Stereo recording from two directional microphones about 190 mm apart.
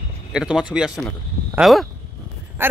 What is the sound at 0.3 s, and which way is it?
Speech, 5° right (ahead or behind).